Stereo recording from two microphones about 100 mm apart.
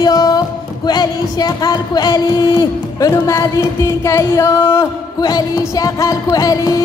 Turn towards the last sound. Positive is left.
turn(degrees=35)  # may be behind; listen again after turning